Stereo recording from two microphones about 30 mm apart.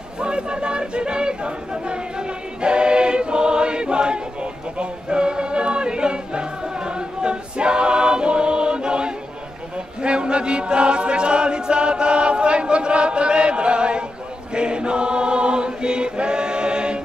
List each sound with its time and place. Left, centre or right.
0.2 s a sound: right
10.0 s chant: right
14.5 s choir: right